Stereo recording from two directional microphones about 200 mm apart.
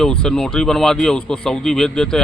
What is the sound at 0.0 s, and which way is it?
Speech, 5° left (ahead or behind).